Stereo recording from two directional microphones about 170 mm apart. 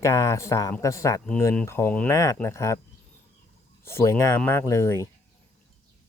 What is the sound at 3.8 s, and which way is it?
Speech, 15° left (ahead or behind).